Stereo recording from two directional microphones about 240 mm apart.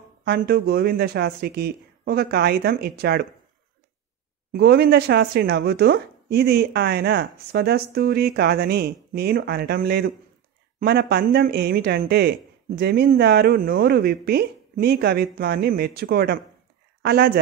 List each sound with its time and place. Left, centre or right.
0.2 s speech: right
4.5 s speech: right